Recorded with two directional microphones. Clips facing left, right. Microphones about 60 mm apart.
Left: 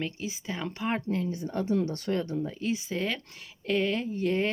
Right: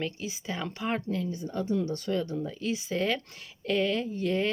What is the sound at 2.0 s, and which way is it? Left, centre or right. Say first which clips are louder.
Speech: even; left.